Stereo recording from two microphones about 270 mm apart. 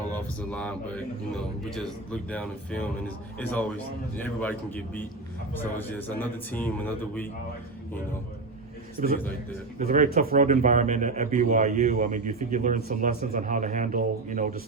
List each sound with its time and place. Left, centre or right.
0.2 s speech: centre
2.3 s speech: centre
9.0 s speech: right